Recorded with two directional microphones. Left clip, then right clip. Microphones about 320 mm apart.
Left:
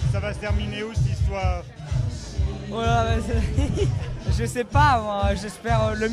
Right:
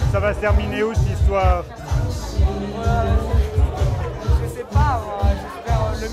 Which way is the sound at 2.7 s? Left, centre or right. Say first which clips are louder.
Left 2 dB; left.